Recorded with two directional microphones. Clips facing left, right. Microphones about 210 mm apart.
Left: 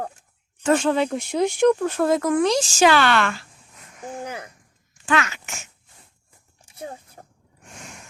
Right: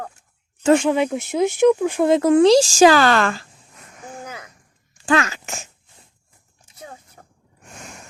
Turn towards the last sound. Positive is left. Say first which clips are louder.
# left 5 dB
turn(degrees=30)  # may be behind; listen again after turning